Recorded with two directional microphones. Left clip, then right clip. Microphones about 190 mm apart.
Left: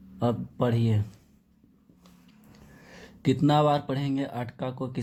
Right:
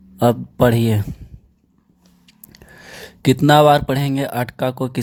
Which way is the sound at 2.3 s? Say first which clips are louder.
Right 13 dB; 45° right (ahead or behind).